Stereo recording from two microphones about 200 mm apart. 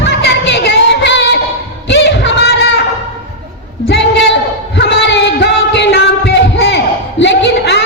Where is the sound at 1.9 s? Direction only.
60° left (ahead or behind).